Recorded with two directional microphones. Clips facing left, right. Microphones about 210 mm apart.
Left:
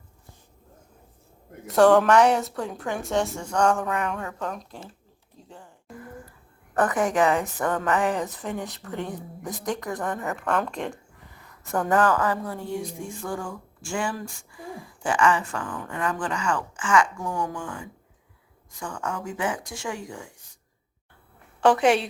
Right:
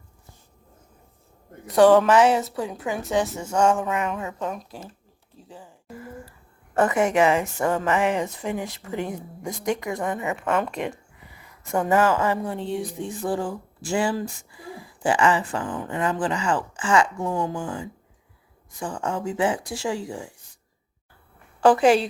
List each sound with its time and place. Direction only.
1.6 s a woman's voice: centre (ahead or behind)
5.5 s a sound: 5° right (ahead or behind)
6.9 s a woman's voice: centre (ahead or behind)
12.1 s speech: 25° right (ahead or behind)
13.2 s speech: 35° right (ahead or behind)
21.6 s a woman's voice: centre (ahead or behind)